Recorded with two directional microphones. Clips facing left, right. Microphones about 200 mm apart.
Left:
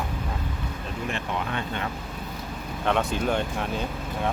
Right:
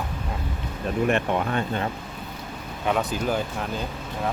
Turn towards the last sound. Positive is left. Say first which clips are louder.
# left 1 dB
turn(degrees=0)  # may be behind; listen again after turning